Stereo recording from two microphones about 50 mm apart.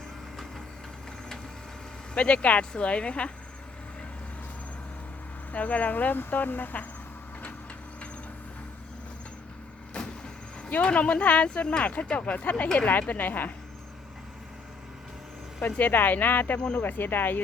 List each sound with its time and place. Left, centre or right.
2.1 s speech: left
5.5 s speech: left
10.7 s speech: left
15.6 s speech: left
16.6 s speech: centre
16.8 s speech: left